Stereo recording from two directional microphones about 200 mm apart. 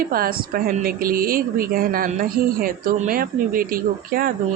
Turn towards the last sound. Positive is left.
turn(degrees=-45)  # may be behind; listen again after turning